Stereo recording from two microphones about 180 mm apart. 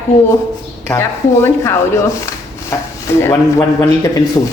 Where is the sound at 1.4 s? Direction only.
15° left (ahead or behind).